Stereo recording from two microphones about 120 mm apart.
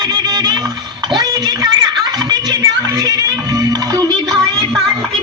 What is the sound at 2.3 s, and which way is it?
Music, 30° right (ahead or behind).